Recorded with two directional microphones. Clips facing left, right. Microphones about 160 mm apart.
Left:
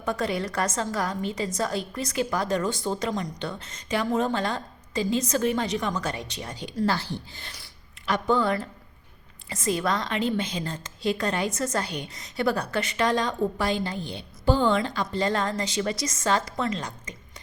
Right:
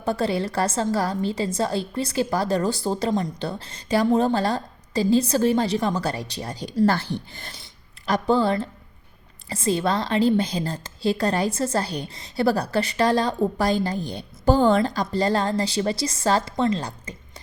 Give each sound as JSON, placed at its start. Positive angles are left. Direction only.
{"t": 0.0, "sound": "a woman's voice", "side_deg": -30}
{"t": 8.0, "sound": "a woman's voice", "side_deg": -35}